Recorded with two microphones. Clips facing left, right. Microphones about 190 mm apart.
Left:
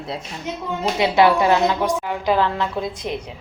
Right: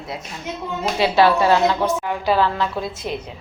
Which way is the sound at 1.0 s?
20° left (ahead or behind).